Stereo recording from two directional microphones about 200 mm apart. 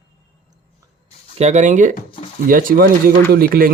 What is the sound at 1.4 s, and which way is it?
Speech, 35° right (ahead or behind).